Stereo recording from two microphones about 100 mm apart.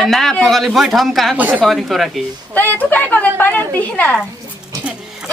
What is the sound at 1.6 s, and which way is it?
Speech, centre (ahead or behind).